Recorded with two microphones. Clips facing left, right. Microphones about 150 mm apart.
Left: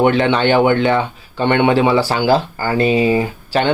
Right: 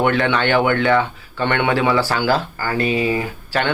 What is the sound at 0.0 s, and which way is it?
Speech, 20° left (ahead or behind).